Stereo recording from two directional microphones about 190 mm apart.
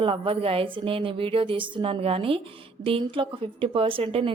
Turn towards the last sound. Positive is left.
turn(degrees=-30)  # may be behind; listen again after turning